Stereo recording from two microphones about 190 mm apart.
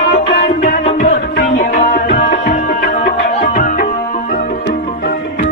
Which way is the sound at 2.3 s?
45° left (ahead or behind).